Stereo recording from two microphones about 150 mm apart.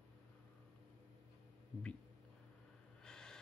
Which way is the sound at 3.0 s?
5° left (ahead or behind).